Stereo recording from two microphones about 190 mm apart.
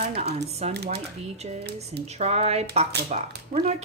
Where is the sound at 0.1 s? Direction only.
35° right (ahead or behind).